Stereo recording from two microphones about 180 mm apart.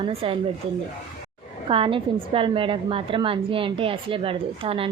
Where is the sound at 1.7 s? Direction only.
30° right (ahead or behind).